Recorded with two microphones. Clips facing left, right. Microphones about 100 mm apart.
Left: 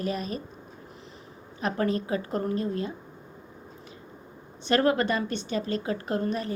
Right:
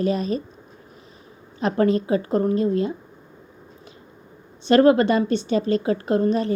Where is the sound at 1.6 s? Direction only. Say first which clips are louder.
Right 7 dB; 35° right (ahead or behind).